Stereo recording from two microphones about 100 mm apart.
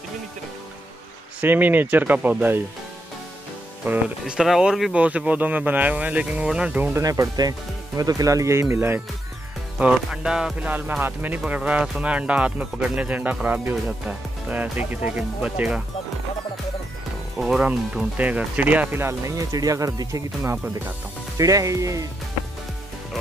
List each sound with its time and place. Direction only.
1.4 s speech: 20° right (ahead or behind)
3.8 s speech: 15° right (ahead or behind)
4.4 s speech: 5° right (ahead or behind)
7.0 s speech: 35° right (ahead or behind)
9.8 s speech: 10° right (ahead or behind)
17.4 s speech: 5° right (ahead or behind); by 22.0 s 35° right (ahead or behind)